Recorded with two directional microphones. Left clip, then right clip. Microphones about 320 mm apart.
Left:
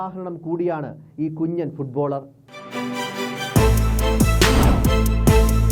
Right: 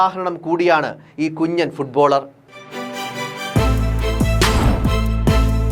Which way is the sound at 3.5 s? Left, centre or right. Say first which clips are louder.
Left 1 dB; centre.